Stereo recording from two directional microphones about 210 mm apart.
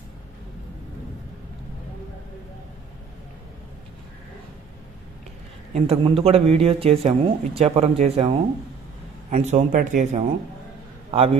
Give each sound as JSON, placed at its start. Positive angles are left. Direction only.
{"t": 5.7, "sound": "speech", "side_deg": -30}
{"t": 11.1, "sound": "a man's voice", "side_deg": -25}